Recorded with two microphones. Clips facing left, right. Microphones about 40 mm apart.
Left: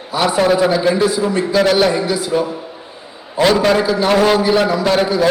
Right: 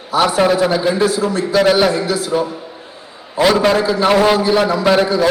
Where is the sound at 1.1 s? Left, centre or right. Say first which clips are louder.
Left 1 dB; centre.